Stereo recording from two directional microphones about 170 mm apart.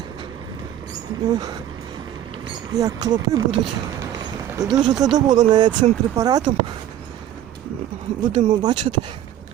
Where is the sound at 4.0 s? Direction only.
20° right (ahead or behind).